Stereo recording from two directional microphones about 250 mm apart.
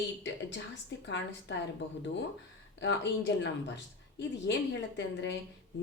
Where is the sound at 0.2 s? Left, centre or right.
Left.